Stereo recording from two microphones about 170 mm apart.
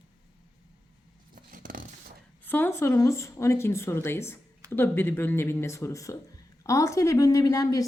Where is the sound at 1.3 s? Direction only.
55° right (ahead or behind).